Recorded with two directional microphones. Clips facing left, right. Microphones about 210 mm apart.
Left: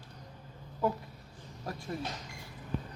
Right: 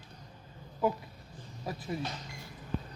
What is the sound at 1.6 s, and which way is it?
Speech, 5° right (ahead or behind).